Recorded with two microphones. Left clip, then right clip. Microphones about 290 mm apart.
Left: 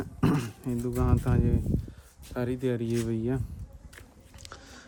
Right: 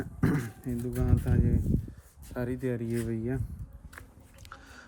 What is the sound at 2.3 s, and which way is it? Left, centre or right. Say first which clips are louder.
Speech: left 3 dB; centre.